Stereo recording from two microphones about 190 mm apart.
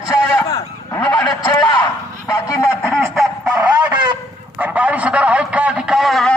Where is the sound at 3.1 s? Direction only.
Centre (ahead or behind).